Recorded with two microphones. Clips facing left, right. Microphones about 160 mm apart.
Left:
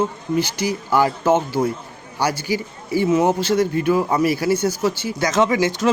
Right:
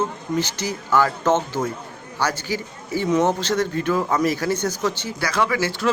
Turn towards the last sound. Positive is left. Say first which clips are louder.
# left 4 dB
turn(degrees=20)  # may be behind; listen again after turning